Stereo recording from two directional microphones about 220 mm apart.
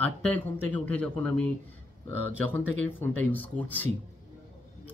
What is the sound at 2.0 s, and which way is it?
Speech, 80° right.